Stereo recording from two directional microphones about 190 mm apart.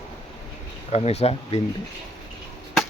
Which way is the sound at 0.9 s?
35° left (ahead or behind).